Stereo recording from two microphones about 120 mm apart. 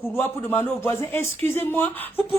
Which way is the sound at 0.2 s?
20° left (ahead or behind).